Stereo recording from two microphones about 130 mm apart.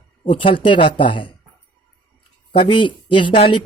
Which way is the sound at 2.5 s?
40° left (ahead or behind).